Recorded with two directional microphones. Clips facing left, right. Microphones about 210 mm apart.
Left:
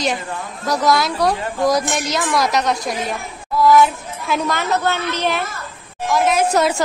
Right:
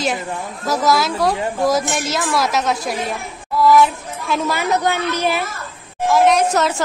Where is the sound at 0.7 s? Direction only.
Centre (ahead or behind).